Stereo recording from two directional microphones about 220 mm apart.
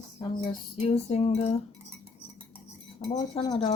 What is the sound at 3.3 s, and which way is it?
Music, 25° left (ahead or behind).